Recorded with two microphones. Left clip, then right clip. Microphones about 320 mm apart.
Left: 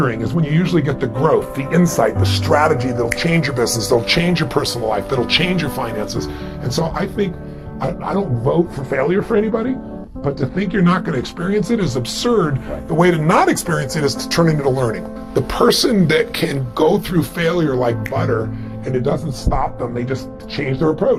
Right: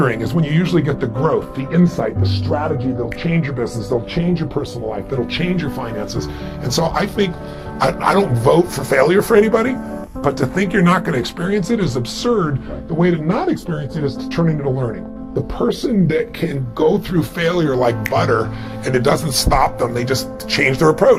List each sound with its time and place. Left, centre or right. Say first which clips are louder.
0.0 s speech: right 2 dB; centre; by 2.3 s left
2.5 s speech: left 6 dB; left; by 6.2 s centre
6.7 s speech: right 3 dB; centre
7.8 s speech: right 6 dB; right
10.2 s speech: right 4 dB; right; by 12.5 s centre
13.0 s speech: left 5 dB; left
13.7 s speech: left 4 dB; left
15.4 s speech: left 5 dB; left; by 18.4 s centre
18.9 s speech: right 4 dB; right